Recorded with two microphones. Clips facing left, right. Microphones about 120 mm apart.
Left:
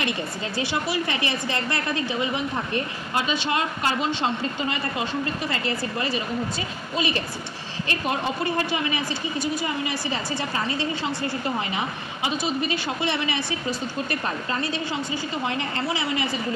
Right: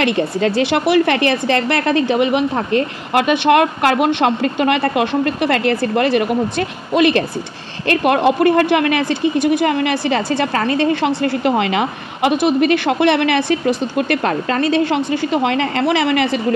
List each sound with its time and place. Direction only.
0.0 s speech: 75° right (ahead or behind)